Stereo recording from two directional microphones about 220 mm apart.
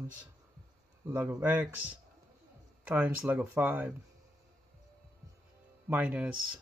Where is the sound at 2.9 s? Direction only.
5° right (ahead or behind).